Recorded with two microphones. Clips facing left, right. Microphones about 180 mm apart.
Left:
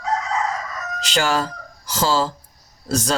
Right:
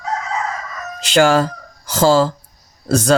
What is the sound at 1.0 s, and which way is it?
Speech, 55° right (ahead or behind).